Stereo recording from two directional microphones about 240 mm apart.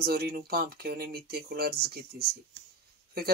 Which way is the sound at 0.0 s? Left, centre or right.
Right.